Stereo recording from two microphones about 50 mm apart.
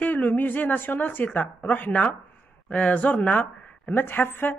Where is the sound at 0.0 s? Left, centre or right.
Left.